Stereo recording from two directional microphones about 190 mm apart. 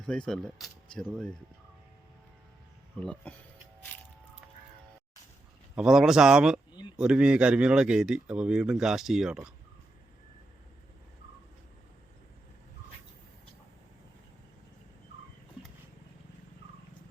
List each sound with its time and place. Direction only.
0.0 s speech: 5° left (ahead or behind)
3.0 s speech: 5° left (ahead or behind)
5.7 s speech: 5° right (ahead or behind)